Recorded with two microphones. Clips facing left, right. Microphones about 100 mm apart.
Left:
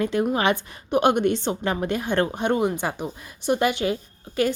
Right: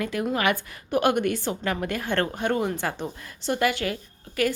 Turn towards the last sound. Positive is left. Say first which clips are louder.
# left 2 dB
turn(degrees=25)  # may be behind; listen again after turning